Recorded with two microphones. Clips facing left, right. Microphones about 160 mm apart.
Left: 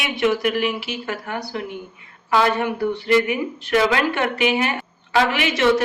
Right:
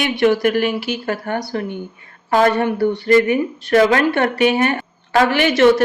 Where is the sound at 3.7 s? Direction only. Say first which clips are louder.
Right 5 dB; 45° right (ahead or behind).